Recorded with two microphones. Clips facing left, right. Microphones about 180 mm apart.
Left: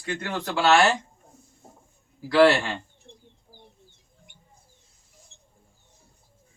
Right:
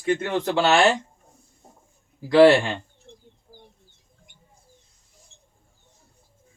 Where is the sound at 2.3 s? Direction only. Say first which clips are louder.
Right 4 dB; 20° right (ahead or behind).